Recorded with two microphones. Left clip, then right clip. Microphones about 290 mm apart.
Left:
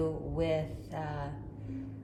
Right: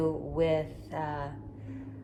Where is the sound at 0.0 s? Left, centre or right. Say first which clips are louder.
Right 4 dB; right.